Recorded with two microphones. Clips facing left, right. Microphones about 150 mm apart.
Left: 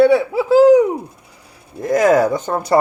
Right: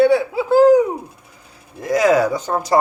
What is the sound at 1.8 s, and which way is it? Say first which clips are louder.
Speech: left 2 dB; 50° left (ahead or behind).